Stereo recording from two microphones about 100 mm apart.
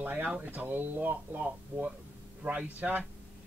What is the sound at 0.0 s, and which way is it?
Speech, 15° right (ahead or behind).